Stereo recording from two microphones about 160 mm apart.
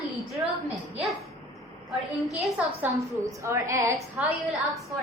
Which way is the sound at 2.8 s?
20° right (ahead or behind).